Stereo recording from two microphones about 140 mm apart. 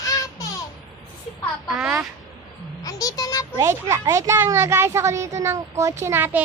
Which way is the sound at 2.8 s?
25° left (ahead or behind).